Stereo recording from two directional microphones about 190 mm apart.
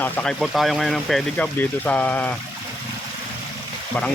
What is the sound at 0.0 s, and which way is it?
Speech, 5° left (ahead or behind).